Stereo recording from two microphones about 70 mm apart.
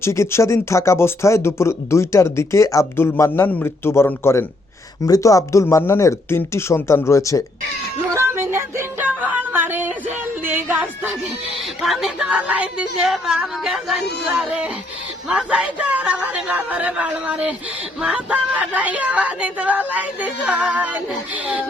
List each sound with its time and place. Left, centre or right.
0.0 s speech: left
3.2 s speech: left
5.0 s speech: left
8.1 s music: right
9.0 s a sound: right
11.8 s speech: centre
12.3 s speech: centre
13.0 s speech: centre
15.3 s speech: centre